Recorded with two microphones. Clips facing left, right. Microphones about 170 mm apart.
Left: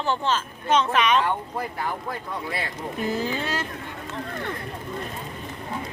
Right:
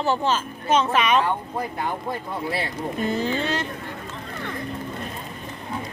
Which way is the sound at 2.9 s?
5° left (ahead or behind).